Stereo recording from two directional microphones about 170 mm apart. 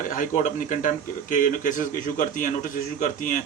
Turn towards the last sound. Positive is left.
turn(degrees=50)  # may be behind; listen again after turning